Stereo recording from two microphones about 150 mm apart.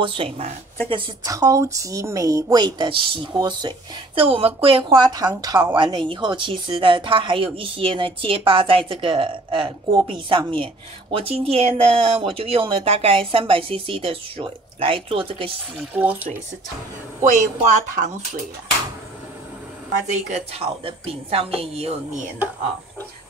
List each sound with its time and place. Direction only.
0.0 s a woman's voice: 40° right (ahead or behind)
1.3 s a woman's voice: 20° right (ahead or behind)
15.9 s speech: 10° right (ahead or behind)
17.2 s speech: 55° right (ahead or behind)
20.1 s a woman's voice: 40° right (ahead or behind)